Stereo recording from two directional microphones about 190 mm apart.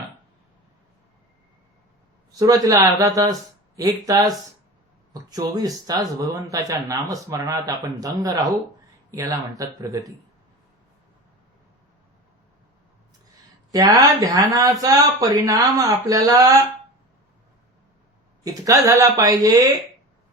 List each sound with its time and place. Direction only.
2.4 s speech: 20° right (ahead or behind)
13.7 s speech: 20° right (ahead or behind)
18.4 s speech: 20° right (ahead or behind)